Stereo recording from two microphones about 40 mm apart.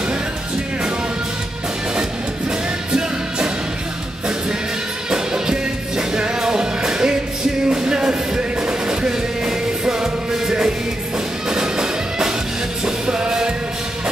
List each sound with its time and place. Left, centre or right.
2.9 s music: right
5.1 s music: centre